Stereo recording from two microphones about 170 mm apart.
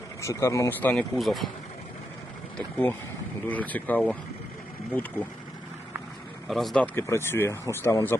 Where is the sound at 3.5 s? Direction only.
10° left (ahead or behind).